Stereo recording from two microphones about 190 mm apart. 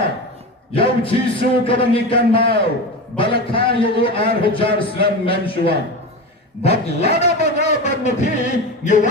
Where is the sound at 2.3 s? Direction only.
30° left (ahead or behind).